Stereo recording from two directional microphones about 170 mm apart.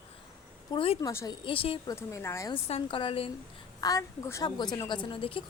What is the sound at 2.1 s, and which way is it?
Speech, 15° left (ahead or behind).